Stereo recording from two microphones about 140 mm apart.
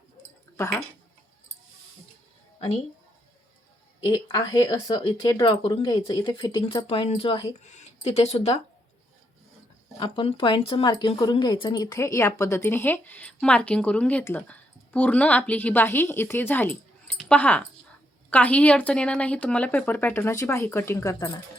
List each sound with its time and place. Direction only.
0.5 s speech: 20° left (ahead or behind)
4.0 s speech: 25° left (ahead or behind)
6.8 s speech: 45° left (ahead or behind)
7.6 s speech: 55° left (ahead or behind)
10.0 s speech: 40° left (ahead or behind)
10.8 s speech: 30° left (ahead or behind)